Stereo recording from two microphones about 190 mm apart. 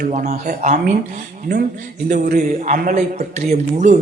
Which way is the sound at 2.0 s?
45° right (ahead or behind).